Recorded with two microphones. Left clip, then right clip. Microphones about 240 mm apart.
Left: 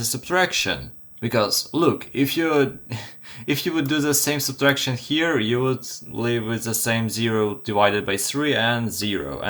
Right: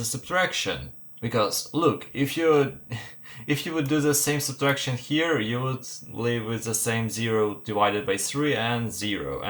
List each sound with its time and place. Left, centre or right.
0.0 s speech: left